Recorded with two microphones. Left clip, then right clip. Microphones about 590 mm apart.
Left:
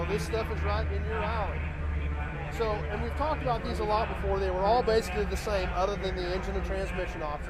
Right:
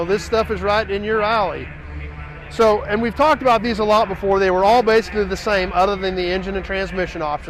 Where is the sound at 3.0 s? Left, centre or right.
Right.